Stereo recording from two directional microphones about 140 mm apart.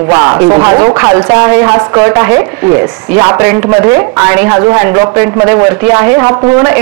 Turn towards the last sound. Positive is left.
turn(degrees=-15)  # may be behind; listen again after turning